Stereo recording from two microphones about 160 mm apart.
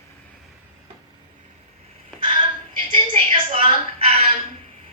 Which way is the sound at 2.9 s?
35° right (ahead or behind).